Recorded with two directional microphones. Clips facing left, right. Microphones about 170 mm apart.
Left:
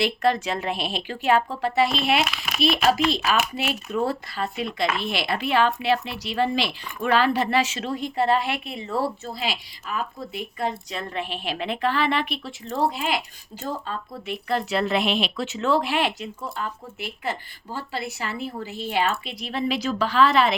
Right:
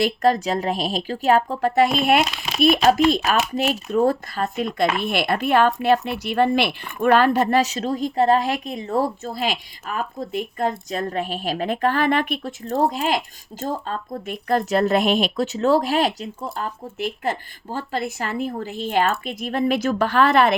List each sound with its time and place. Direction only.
0.0 s a woman's voice: 40° right (ahead or behind)